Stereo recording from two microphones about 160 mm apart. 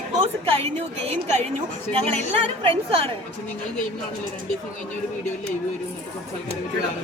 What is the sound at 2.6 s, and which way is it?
Speech, 35° right (ahead or behind).